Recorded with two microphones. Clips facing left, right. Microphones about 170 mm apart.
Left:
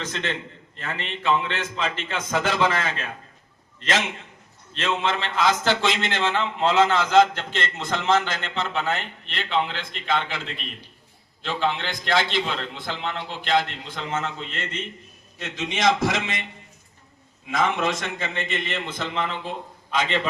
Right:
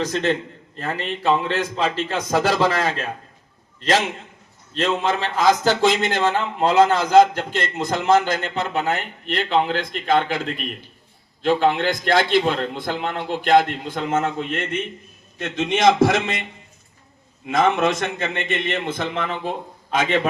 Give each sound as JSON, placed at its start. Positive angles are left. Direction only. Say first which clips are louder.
{"t": 0.0, "sound": "a man's voice", "louder": "right 8 dB", "side_deg": -40}
{"t": 4.7, "sound": "a man's voice", "louder": "right 4 dB", "side_deg": -40}
{"t": 17.5, "sound": "a man's voice", "louder": "right 5 dB", "side_deg": -55}